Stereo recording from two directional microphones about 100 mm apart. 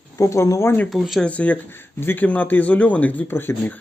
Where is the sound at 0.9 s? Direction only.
Centre (ahead or behind).